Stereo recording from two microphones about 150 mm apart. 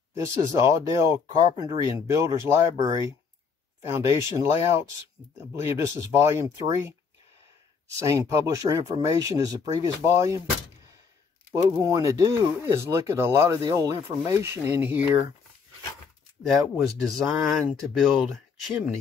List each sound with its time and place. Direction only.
0.2 s speech: 20° right (ahead or behind)
8.0 s speech: 20° right (ahead or behind)
11.5 s speech: 25° right (ahead or behind)
16.4 s speech: centre (ahead or behind)